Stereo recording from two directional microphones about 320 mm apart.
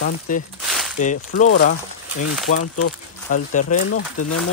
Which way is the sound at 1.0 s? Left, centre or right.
Left.